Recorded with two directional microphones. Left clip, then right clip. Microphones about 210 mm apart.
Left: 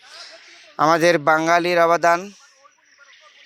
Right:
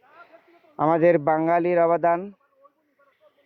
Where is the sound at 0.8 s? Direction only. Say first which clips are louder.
Left 3 dB; centre (ahead or behind).